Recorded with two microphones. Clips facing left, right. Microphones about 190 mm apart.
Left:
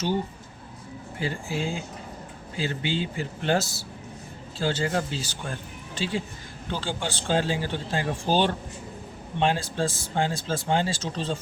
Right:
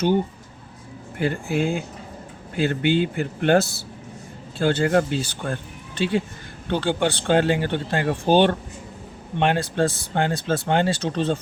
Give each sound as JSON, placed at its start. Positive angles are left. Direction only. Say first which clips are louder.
{"t": 1.2, "sound": "speech", "louder": "right 7 dB", "side_deg": -60}